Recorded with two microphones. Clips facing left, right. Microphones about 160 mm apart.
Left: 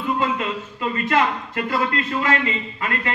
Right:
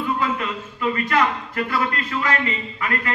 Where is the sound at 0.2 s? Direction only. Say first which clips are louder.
Left 1 dB; 25° left (ahead or behind).